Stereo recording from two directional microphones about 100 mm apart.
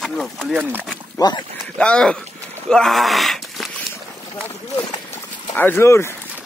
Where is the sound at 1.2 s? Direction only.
40° left (ahead or behind).